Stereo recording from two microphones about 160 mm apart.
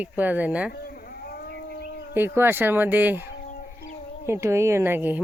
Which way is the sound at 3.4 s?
70° left (ahead or behind).